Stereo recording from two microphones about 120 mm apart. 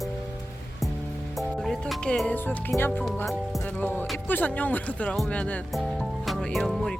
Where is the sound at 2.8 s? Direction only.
15° left (ahead or behind).